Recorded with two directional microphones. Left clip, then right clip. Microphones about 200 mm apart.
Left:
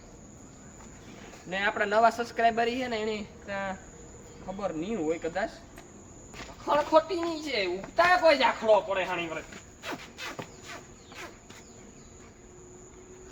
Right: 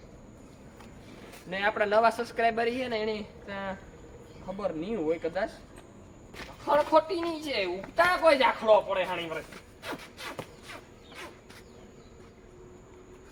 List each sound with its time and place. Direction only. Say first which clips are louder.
1.5 s speech: right 1 dB; centre (ahead or behind)
6.7 s speech: even; 15° right (ahead or behind)